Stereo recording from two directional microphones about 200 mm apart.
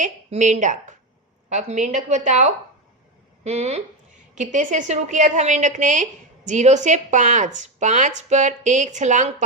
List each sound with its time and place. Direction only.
0.0 s a woman's voice: 35° right (ahead or behind)